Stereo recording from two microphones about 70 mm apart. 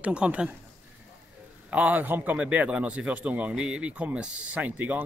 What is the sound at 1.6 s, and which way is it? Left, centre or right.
Speech, right.